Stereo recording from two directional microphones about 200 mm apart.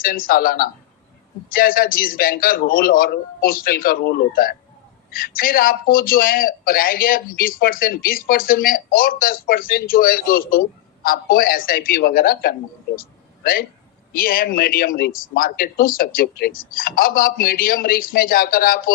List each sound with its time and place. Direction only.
0.0 s speech: 45° left (ahead or behind)
13.0 s a sound: 45° left (ahead or behind)
14.1 s speech: 45° left (ahead or behind)